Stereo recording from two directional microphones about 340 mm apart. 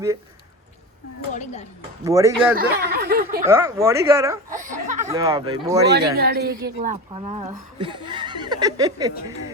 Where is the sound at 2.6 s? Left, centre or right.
Right.